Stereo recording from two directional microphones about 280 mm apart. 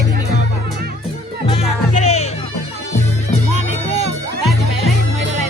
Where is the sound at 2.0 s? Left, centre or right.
Left.